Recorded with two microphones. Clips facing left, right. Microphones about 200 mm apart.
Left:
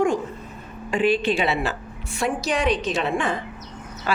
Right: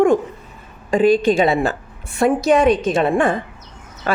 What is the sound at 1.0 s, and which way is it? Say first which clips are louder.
A woman's voice: right 7 dB; 45° right (ahead or behind).